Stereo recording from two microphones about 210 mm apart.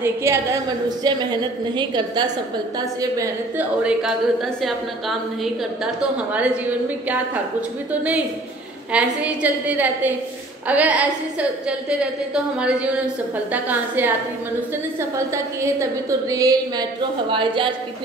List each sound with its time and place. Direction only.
0.0 s a woman's voice: 10° right (ahead or behind)
3.8 s a woman's voice: centre (ahead or behind)
7.9 s a woman's voice: 5° right (ahead or behind); by 17.7 s 25° right (ahead or behind)